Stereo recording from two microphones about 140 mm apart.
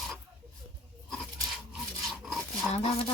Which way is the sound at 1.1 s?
Centre (ahead or behind).